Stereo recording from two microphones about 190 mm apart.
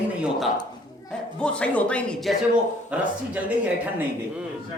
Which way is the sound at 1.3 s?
5° left (ahead or behind).